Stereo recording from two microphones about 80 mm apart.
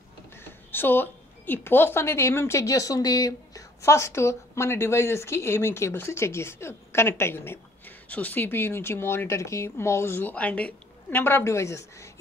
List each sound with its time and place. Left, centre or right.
0.4 s speech: left